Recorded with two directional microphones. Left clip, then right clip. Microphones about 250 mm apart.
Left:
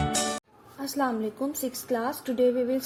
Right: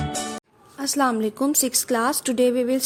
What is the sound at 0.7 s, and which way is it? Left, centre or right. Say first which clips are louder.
A woman's voice: right 7 dB; right.